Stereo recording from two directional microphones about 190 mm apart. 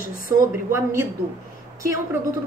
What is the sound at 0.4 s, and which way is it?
Speech, 15° right (ahead or behind).